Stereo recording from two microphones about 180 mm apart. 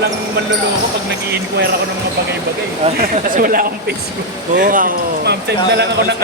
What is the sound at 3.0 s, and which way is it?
Speech, 55° right (ahead or behind).